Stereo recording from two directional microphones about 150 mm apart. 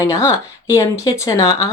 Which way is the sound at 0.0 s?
20° left (ahead or behind).